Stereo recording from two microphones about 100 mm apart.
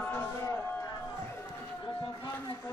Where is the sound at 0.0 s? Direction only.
20° left (ahead or behind).